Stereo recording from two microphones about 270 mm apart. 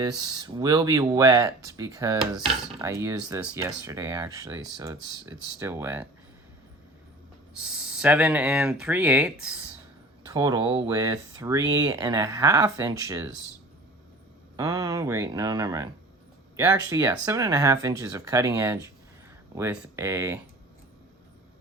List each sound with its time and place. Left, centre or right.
0.0 s speech: centre
7.5 s speech: centre
10.2 s speech: centre
14.5 s speech: centre